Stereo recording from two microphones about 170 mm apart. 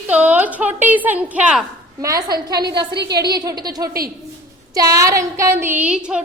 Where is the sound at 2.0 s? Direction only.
20° right (ahead or behind).